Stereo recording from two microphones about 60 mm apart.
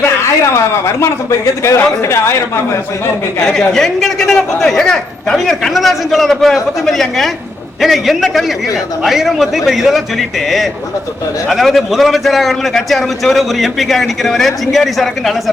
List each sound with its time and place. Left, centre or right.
0.0 s speech: left
3.4 s a man's voice: centre